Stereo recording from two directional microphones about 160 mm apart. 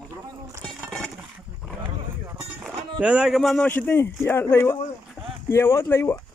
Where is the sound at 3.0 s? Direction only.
5° right (ahead or behind); by 6.1 s 15° left (ahead or behind).